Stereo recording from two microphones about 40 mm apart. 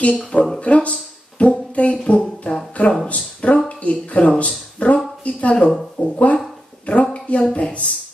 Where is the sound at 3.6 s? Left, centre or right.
Left.